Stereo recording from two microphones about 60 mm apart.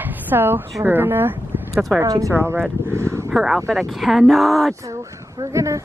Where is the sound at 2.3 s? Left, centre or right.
Right.